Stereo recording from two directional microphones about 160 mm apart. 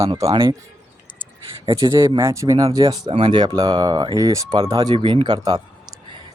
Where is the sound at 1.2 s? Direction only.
35° right (ahead or behind).